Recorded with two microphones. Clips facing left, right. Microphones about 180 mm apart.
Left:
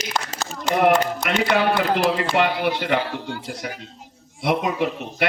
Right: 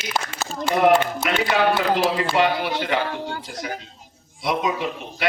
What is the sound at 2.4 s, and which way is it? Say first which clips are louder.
Speech: even; 55° left (ahead or behind).